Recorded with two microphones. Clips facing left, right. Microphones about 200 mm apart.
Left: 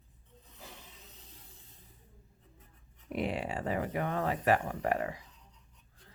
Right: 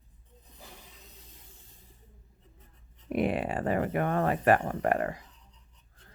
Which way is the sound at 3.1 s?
55° right (ahead or behind).